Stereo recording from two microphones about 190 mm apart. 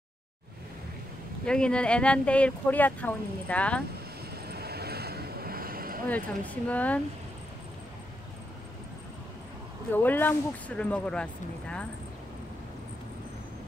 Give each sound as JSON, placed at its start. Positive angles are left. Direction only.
{"t": 1.4, "sound": "speech", "side_deg": 5}
{"t": 4.5, "sound": "vehicle", "side_deg": -55}
{"t": 6.0, "sound": "speech", "side_deg": 10}
{"t": 9.9, "sound": "speech", "side_deg": 10}